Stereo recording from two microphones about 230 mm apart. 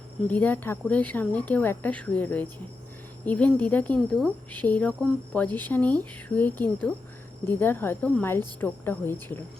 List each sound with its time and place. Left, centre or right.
0.3 s speech: centre